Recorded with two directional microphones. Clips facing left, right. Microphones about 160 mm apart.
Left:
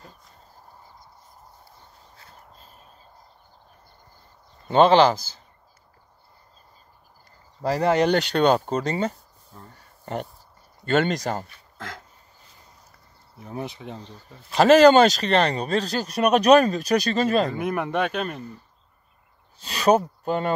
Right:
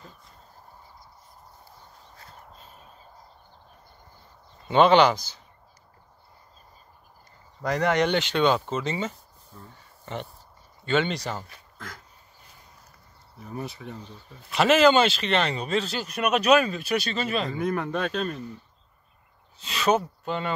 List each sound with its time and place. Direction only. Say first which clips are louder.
4.8 s speech: left 2 dB; 30° left (ahead or behind)
7.6 s speech: left 3 dB; 30° left (ahead or behind)
10.9 s speech: left 3 dB; 45° left (ahead or behind)
13.8 s speech: left 2 dB; 30° left (ahead or behind)
17.6 s speech: left 1 dB; 10° left (ahead or behind)
17.9 s speech: left 3 dB; 65° left (ahead or behind)
19.6 s speech: left 4 dB; 40° left (ahead or behind)